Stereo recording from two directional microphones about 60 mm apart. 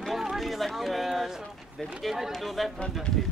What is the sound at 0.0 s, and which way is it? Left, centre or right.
Speech, centre.